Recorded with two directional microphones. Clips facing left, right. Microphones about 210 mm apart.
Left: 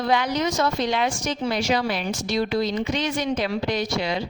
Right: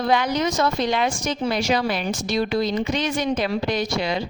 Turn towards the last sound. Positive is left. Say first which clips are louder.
# right 1 dB
turn(degrees=-50)  # may be behind; listen again after turning